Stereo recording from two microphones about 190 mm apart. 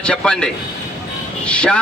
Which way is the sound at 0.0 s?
5° left (ahead or behind).